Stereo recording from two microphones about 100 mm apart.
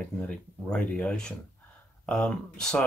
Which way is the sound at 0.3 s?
10° left (ahead or behind).